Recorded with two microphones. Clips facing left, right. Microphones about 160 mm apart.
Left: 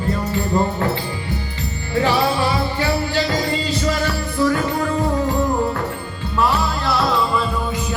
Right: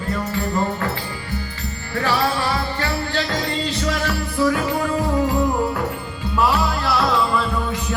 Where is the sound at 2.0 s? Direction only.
20° left (ahead or behind); by 5.3 s 5° right (ahead or behind).